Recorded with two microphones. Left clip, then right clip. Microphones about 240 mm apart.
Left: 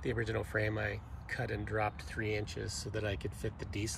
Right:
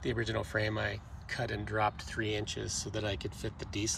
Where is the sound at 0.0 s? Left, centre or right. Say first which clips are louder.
Right 2 dB; centre.